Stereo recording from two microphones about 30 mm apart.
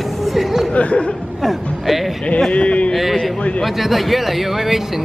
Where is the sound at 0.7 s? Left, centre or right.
Left.